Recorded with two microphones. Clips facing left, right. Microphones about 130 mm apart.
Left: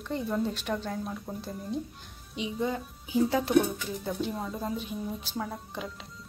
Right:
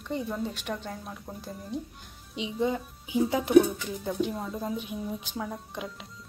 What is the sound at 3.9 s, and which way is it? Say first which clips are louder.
A child's voice: right 2 dB; 5° right (ahead or behind).